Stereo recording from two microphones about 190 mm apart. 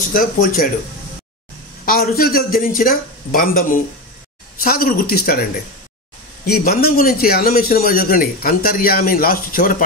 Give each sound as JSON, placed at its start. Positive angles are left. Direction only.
{"t": 0.1, "sound": "a man's voice", "side_deg": 45}
{"t": 1.9, "sound": "a man's voice", "side_deg": 55}
{"t": 6.4, "sound": "a man's voice", "side_deg": 55}